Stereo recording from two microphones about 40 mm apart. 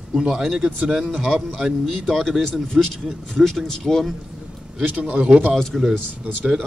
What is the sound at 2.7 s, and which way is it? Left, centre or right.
Speech, right.